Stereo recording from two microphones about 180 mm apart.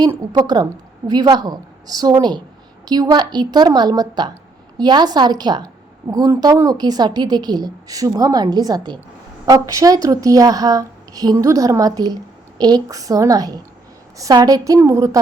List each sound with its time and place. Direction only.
0.0 s a woman's voice: 20° right (ahead or behind)